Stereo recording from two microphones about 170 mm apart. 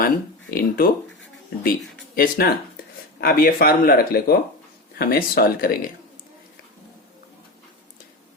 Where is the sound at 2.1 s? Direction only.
60° left (ahead or behind).